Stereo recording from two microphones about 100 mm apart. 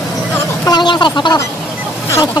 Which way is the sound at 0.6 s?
45° left (ahead or behind).